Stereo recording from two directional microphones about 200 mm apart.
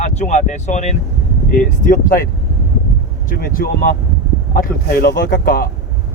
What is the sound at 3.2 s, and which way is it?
Speech, 45° left (ahead or behind).